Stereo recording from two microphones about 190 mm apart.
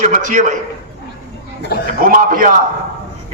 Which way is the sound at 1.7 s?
55° left (ahead or behind).